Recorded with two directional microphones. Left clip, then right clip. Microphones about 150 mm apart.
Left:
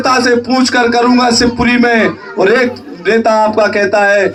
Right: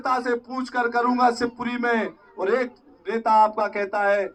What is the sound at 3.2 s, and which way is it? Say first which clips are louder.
Speech: left 7 dB; 25° left (ahead or behind).